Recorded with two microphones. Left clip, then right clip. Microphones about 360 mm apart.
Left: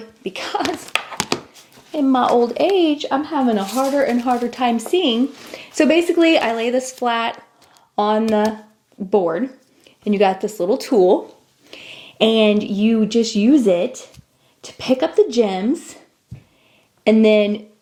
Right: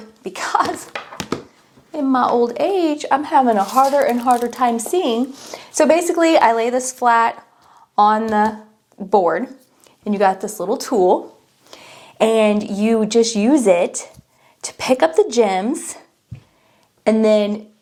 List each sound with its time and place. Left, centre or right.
0.2 s speech: right
1.9 s speech: right
9.0 s speech: right
11.7 s speech: right
17.0 s speech: right